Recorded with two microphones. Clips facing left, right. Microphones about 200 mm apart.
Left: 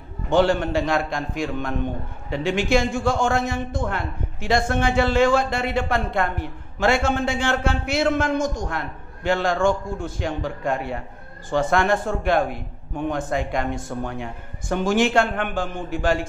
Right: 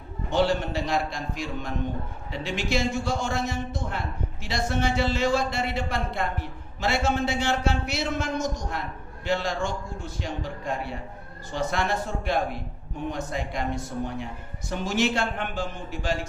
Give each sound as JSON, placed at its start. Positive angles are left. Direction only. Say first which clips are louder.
{"t": 0.3, "sound": "a man's voice", "louder": "left 5 dB", "side_deg": 50}
{"t": 14.0, "sound": "a man's voice", "louder": "left 2 dB", "side_deg": 65}